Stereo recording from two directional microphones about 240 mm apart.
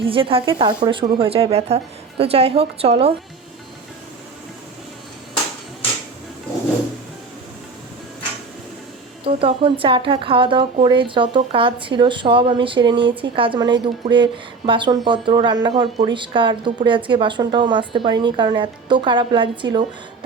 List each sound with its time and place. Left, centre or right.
0.0 s speech: right
9.2 s speech: right